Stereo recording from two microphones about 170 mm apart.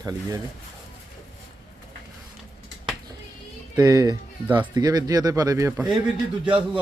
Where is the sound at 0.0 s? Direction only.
20° right (ahead or behind).